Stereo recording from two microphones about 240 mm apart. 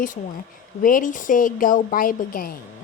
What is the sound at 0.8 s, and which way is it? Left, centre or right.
Speech, left.